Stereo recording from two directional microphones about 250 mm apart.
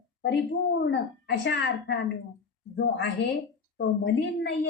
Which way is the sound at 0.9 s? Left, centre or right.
Left.